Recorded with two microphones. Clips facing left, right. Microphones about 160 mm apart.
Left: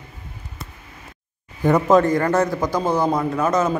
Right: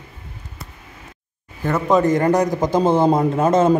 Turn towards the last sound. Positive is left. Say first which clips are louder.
# right 5 dB
turn(degrees=-30)  # may be behind; listen again after turning